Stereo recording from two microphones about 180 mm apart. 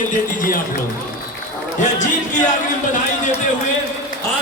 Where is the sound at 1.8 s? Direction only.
45° left (ahead or behind).